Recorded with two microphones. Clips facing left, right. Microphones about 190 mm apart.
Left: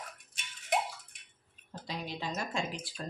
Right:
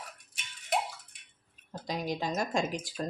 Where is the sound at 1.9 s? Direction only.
45° right (ahead or behind).